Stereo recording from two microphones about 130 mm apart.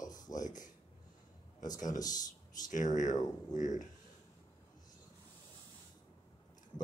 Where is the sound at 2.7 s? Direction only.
75° left (ahead or behind).